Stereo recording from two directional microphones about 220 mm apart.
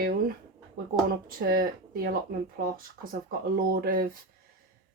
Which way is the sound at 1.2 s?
40° right (ahead or behind).